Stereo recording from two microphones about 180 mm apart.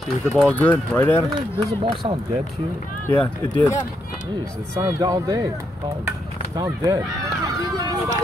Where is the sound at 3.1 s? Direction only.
10° left (ahead or behind).